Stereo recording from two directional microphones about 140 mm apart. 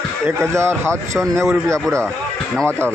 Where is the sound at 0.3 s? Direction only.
20° right (ahead or behind).